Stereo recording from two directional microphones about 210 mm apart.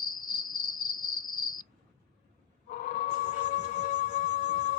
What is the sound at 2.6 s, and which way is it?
Music, 40° left (ahead or behind).